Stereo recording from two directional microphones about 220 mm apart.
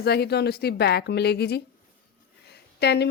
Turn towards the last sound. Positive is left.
turn(degrees=50)  # may be behind; listen again after turning